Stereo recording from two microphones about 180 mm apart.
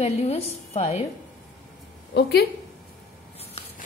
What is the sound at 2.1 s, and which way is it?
Speech, 65° left (ahead or behind).